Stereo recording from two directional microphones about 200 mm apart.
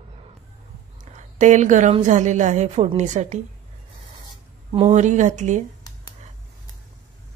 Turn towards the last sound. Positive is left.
turn(degrees=-35)  # may be behind; listen again after turning